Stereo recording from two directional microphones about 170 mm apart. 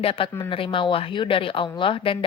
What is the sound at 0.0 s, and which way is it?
Speech, 30° left (ahead or behind).